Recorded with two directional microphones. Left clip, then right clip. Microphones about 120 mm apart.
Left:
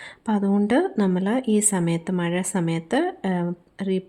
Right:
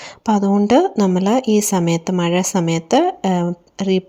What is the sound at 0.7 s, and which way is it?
A woman's voice, 35° right (ahead or behind).